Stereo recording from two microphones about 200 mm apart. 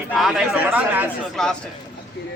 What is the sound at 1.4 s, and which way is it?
Speech, 5° left (ahead or behind).